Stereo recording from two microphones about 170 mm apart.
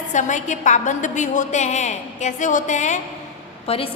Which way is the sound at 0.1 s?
45° left (ahead or behind).